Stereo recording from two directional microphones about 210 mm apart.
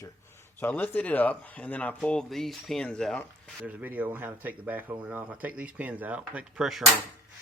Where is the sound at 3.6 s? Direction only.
10° right (ahead or behind).